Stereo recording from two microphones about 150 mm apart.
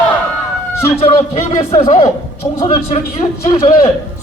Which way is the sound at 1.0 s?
45° left (ahead or behind).